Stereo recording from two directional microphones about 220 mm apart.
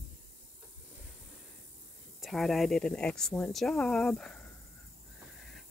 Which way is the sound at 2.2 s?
Centre (ahead or behind).